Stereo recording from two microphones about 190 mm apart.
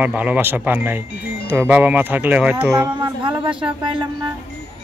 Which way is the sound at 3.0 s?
25° right (ahead or behind).